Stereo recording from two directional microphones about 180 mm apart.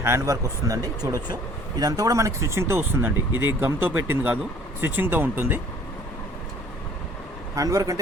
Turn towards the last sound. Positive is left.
turn(degrees=-20)  # may be behind; listen again after turning